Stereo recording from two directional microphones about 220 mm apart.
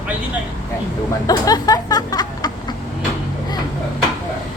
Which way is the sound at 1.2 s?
15° left (ahead or behind).